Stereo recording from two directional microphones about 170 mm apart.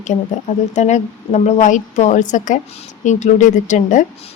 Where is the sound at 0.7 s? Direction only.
45° left (ahead or behind).